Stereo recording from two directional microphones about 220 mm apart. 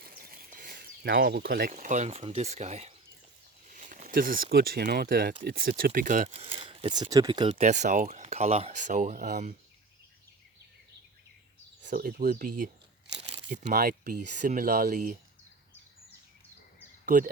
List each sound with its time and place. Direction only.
0.0 s speech: 45° right (ahead or behind)
11.9 s speech: 40° right (ahead or behind)